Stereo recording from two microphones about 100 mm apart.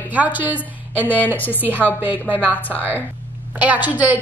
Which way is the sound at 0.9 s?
15° left (ahead or behind).